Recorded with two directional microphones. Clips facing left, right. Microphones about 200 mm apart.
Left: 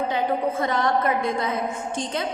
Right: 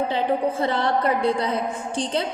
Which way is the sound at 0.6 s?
30° right (ahead or behind).